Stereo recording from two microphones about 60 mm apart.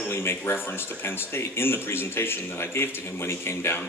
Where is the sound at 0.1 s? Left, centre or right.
Left.